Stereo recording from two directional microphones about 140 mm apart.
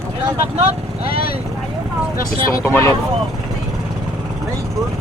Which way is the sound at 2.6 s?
15° left (ahead or behind).